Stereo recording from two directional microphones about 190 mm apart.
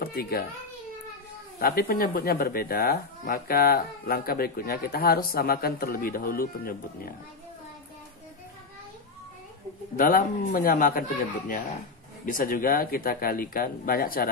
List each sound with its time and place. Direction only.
0.0 s a child's voice: 55° left (ahead or behind)
1.6 s speech: 50° left (ahead or behind)
9.9 s speech: 45° left (ahead or behind)